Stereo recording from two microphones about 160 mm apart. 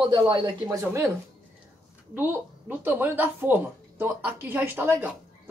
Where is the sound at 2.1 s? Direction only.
10° right (ahead or behind).